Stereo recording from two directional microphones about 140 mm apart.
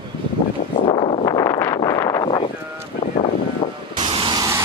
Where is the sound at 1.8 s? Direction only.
25° left (ahead or behind).